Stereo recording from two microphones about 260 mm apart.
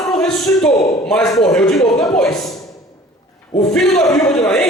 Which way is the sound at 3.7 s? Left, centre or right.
Centre.